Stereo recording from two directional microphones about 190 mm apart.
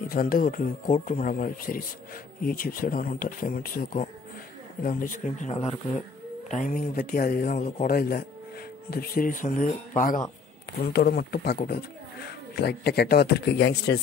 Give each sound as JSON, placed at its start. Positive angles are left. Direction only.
{"t": 0.1, "sound": "speech", "side_deg": 50}
{"t": 10.9, "sound": "speech", "side_deg": 55}